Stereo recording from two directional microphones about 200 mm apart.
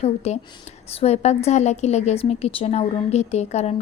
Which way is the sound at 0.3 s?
35° left (ahead or behind).